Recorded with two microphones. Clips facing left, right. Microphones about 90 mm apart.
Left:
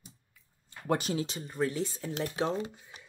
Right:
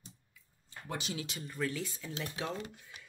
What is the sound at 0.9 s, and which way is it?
Speech, 45° left (ahead or behind).